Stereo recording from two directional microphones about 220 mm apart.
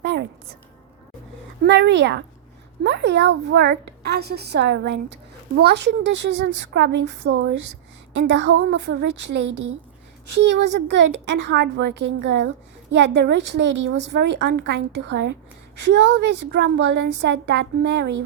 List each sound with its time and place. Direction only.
0.0 s a sound: 50° right (ahead or behind)
1.6 s a child's voice: 55° right (ahead or behind)
10.8 s a child's voice: 50° right (ahead or behind)